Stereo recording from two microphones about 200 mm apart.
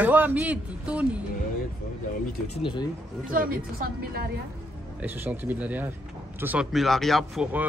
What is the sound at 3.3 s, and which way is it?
A woman's voice, 45° right (ahead or behind).